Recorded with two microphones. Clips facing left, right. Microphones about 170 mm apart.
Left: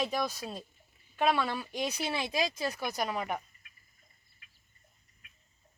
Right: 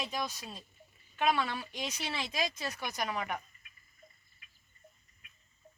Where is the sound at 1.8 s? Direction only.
10° left (ahead or behind).